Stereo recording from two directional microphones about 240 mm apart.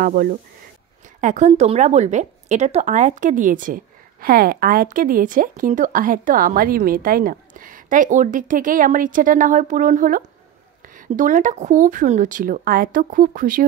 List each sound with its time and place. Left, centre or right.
0.0 s a woman's voice: right